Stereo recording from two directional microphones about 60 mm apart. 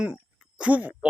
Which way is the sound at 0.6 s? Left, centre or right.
Right.